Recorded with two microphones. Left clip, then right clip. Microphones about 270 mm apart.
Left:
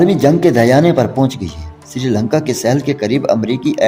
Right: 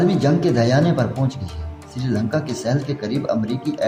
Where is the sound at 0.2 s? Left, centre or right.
Left.